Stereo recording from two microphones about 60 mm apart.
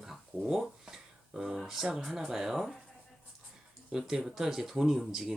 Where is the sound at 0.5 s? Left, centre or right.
Centre.